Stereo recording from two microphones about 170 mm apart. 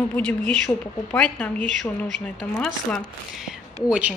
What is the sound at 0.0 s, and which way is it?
A woman's voice, 10° left (ahead or behind).